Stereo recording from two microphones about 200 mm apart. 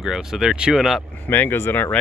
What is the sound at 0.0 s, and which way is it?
Speech, centre (ahead or behind).